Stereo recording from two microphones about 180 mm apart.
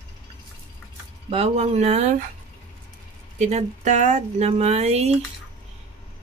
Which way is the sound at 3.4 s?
40° right (ahead or behind).